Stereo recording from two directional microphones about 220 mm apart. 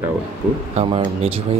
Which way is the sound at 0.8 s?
25° right (ahead or behind).